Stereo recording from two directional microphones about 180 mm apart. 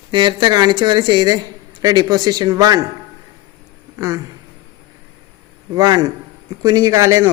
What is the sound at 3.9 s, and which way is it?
Speech, 15° right (ahead or behind).